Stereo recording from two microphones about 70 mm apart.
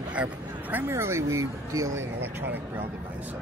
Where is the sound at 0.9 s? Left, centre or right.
Right.